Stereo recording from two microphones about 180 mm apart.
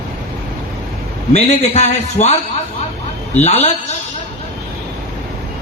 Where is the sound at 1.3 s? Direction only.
35° left (ahead or behind).